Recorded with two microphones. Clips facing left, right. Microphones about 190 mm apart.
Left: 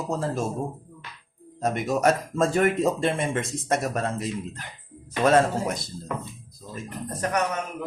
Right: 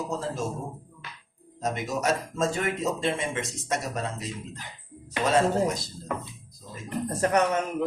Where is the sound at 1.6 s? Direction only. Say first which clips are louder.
Left 5 dB; 55° left (ahead or behind).